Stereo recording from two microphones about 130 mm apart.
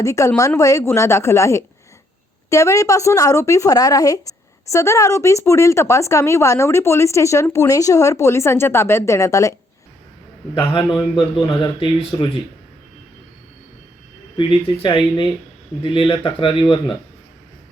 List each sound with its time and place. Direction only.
0.0 s speech: 25° left (ahead or behind)
11.4 s speech: 40° left (ahead or behind)
14.3 s speech: 40° left (ahead or behind)